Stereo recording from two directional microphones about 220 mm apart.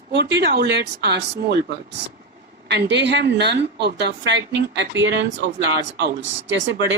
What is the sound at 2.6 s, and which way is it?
Speech, 50° right (ahead or behind).